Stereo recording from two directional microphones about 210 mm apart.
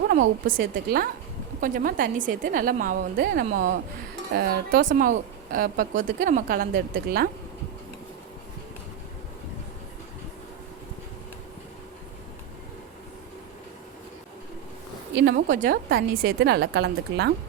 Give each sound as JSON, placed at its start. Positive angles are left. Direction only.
{"t": 0.1, "sound": "a woman's voice", "side_deg": -45}
{"t": 15.1, "sound": "speech", "side_deg": -55}
{"t": 15.4, "sound": "a woman's voice", "side_deg": -35}